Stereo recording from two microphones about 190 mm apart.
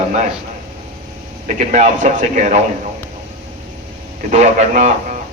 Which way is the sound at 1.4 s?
40° right (ahead or behind).